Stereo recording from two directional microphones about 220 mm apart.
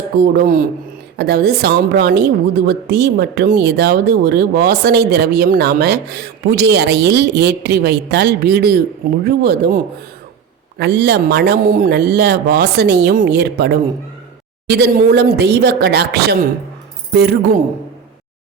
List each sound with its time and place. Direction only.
0.3 s a woman's voice: 40° right (ahead or behind)